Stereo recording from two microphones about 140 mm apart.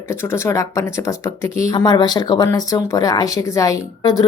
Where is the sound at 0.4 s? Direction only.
20° left (ahead or behind).